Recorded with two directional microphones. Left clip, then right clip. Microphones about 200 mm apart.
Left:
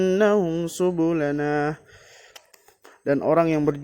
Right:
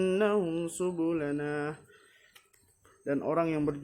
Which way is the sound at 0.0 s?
35° left (ahead or behind).